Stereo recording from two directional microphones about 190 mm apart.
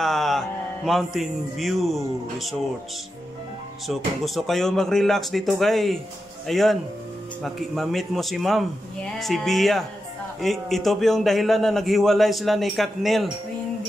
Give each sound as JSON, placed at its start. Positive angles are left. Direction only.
{"t": 0.0, "sound": "music", "side_deg": 0}
{"t": 0.8, "sound": "a man's voice", "side_deg": 0}
{"t": 3.8, "sound": "a man's voice", "side_deg": 0}